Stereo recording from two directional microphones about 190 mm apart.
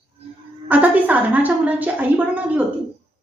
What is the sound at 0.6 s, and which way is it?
A woman's voice, 10° right (ahead or behind).